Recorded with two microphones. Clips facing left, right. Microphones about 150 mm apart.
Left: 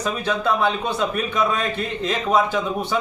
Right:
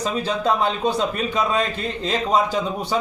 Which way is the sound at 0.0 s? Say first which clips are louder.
Right 1 dB; 35° right (ahead or behind).